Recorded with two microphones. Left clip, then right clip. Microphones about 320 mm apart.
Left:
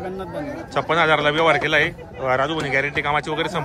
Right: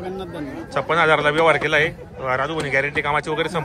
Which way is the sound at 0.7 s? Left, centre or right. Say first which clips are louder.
Right 1 dB; centre.